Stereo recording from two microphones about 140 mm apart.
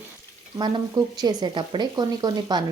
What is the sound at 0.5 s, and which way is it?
A woman's voice, 30° right (ahead or behind).